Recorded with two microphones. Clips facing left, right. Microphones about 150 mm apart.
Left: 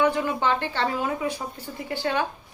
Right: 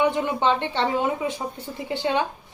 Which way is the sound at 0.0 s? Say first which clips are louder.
Right 1 dB; 20° right (ahead or behind).